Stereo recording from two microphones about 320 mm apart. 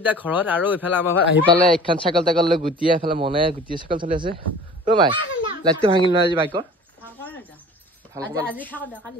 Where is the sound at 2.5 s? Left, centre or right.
Centre.